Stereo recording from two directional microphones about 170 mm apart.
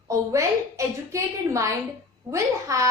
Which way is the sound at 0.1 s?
20° right (ahead or behind).